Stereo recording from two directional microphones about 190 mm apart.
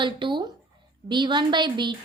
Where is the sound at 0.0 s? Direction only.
25° right (ahead or behind).